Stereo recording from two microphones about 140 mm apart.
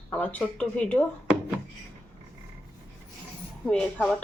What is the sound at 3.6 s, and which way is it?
Speech, 10° left (ahead or behind).